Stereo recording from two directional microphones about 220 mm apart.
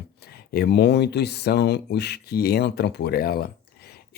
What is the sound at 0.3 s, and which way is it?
Speech, 45° left (ahead or behind).